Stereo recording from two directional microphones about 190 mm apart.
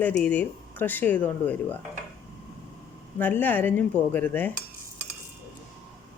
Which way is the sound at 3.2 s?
10° left (ahead or behind).